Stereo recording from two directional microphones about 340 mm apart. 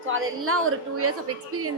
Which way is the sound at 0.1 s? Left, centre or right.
Right.